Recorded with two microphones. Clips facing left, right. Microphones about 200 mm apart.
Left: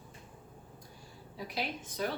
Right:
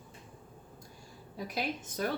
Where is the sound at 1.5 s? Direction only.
45° right (ahead or behind).